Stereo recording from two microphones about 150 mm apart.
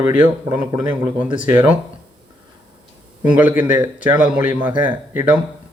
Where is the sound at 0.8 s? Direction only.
30° right (ahead or behind).